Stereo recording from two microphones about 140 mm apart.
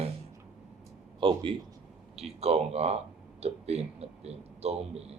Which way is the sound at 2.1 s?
50° right (ahead or behind).